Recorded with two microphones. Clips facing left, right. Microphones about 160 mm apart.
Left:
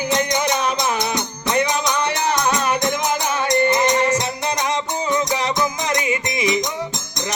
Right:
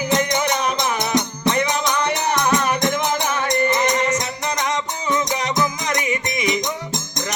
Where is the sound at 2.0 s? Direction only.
30° left (ahead or behind).